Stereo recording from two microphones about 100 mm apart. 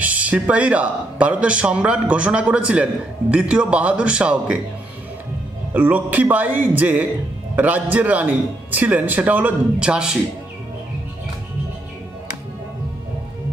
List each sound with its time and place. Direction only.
0.0 s a man's voice: 15° right (ahead or behind)
5.7 s a man's voice: 15° right (ahead or behind)